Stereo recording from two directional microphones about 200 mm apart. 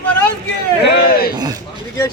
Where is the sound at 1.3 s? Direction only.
20° right (ahead or behind).